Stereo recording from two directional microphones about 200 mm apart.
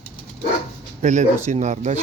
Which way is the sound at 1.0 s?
35° right (ahead or behind).